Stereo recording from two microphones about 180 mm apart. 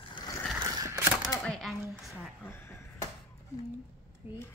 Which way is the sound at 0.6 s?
15° right (ahead or behind).